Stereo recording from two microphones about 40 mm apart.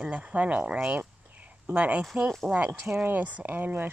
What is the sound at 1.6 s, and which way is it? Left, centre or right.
Speech, right.